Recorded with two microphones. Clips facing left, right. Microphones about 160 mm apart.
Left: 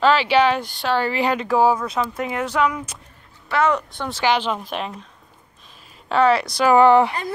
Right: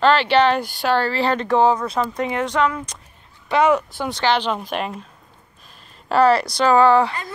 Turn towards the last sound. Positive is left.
turn(degrees=20)  # may be behind; listen again after turning